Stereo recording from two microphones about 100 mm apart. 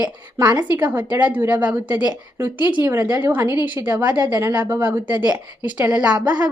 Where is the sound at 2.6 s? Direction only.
45° left (ahead or behind).